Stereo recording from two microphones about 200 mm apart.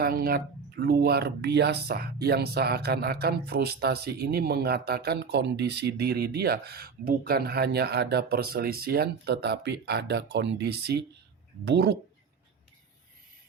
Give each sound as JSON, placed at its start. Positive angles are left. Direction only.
{"t": 0.0, "sound": "speech", "side_deg": -50}